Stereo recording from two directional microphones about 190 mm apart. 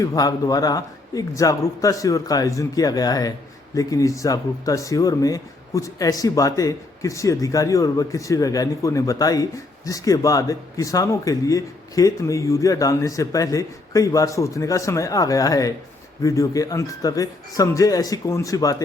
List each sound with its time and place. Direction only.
0.0 s a man's voice: 20° left (ahead or behind)